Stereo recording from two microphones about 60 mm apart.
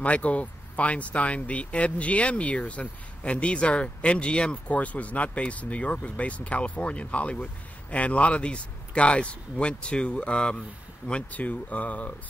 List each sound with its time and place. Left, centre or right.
0.0 s speech: left